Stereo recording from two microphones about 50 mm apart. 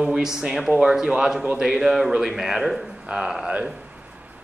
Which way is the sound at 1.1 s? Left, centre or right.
Centre.